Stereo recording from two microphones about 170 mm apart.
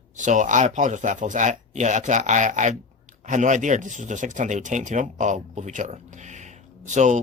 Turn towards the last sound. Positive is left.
turn(degrees=-45)  # may be behind; listen again after turning